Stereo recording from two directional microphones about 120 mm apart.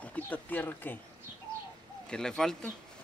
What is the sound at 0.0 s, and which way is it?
Speech, 15° left (ahead or behind).